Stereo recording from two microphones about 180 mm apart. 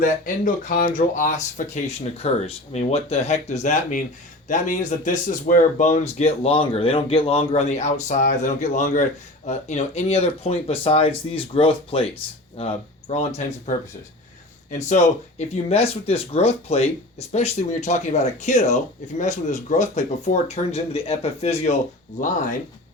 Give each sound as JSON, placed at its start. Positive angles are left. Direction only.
{"t": 0.0, "sound": "speech", "side_deg": 50}
{"t": 14.8, "sound": "speech", "side_deg": 40}